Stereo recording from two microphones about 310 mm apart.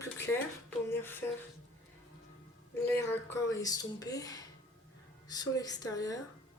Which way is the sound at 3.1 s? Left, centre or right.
Centre.